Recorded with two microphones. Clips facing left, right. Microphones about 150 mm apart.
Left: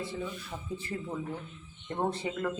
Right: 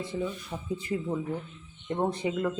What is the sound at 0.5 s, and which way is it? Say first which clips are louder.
Speech: right 3 dB; 5° right (ahead or behind).